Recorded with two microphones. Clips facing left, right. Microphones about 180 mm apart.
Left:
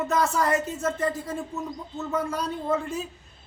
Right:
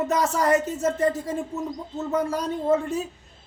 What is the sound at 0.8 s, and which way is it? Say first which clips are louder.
Speech: right 4 dB; 35° right (ahead or behind).